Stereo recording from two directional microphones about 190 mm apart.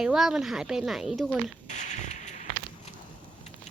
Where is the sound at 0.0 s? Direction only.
5° right (ahead or behind).